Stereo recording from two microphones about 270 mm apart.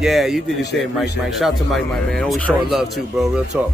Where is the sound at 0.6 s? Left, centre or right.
Left.